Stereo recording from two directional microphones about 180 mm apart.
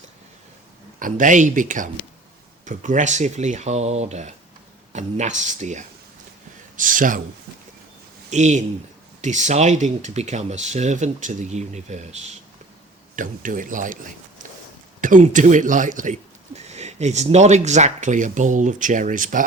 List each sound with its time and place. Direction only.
0.9 s speech: 45° right (ahead or behind)
8.3 s speech: 40° right (ahead or behind)